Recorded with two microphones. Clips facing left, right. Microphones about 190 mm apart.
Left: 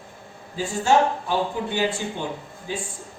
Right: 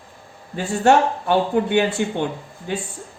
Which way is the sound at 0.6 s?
65° right (ahead or behind).